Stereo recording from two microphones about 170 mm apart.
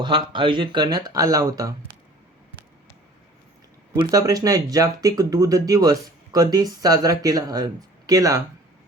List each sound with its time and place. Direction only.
0.0 s speech: 30° right (ahead or behind)
3.9 s speech: 20° right (ahead or behind)